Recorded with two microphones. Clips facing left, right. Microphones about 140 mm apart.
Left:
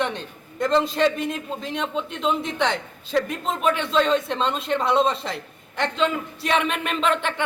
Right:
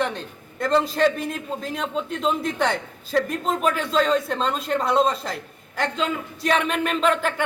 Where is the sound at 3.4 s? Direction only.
40° right (ahead or behind).